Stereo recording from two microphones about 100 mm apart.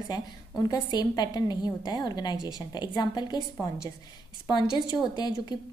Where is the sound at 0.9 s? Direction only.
40° left (ahead or behind).